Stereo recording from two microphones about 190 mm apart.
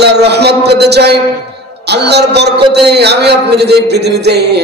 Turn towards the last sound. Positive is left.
turn(degrees=-60)  # may be behind; listen again after turning